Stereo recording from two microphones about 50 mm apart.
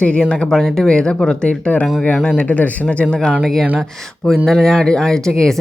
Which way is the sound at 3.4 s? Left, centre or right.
Centre.